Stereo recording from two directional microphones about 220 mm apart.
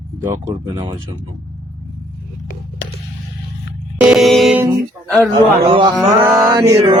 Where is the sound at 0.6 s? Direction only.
20° right (ahead or behind).